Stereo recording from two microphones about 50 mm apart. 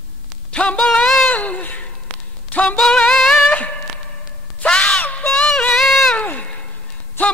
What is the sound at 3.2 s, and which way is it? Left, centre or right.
Music, centre.